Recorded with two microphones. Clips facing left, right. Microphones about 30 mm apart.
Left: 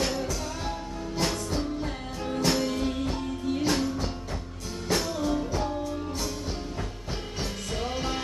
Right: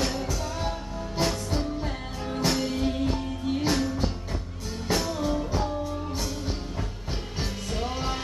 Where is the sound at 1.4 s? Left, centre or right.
Centre.